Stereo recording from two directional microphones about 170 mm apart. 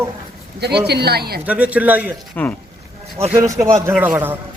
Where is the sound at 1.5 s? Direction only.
10° right (ahead or behind).